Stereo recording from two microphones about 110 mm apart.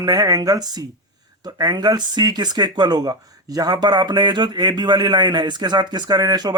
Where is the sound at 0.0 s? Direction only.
35° right (ahead or behind).